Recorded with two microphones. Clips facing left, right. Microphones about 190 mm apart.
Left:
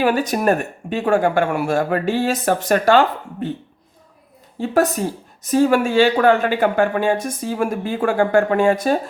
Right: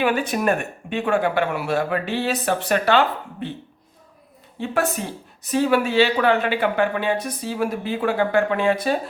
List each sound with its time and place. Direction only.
0.0 s speech: 40° left (ahead or behind)
4.6 s speech: 40° left (ahead or behind)